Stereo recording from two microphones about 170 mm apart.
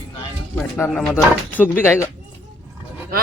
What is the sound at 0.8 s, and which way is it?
Speech, 10° left (ahead or behind).